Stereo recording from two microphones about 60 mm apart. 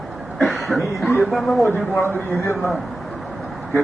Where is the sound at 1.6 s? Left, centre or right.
Left.